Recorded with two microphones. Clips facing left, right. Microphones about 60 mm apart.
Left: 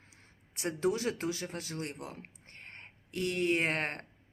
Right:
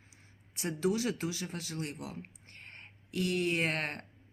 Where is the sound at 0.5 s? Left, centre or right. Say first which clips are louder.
Even; left.